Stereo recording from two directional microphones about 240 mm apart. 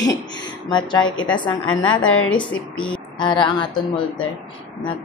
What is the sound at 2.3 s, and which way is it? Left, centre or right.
Speech, centre.